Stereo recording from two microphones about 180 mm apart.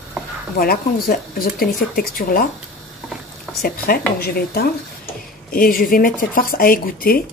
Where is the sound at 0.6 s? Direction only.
55° left (ahead or behind).